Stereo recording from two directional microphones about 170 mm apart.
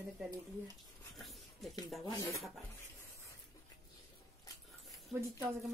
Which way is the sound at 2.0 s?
25° left (ahead or behind).